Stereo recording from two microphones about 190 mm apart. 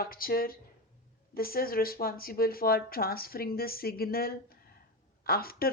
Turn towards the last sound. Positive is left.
turn(degrees=50)  # may be behind; listen again after turning